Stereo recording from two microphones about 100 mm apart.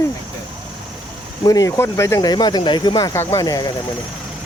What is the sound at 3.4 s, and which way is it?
Speech, 40° left (ahead or behind).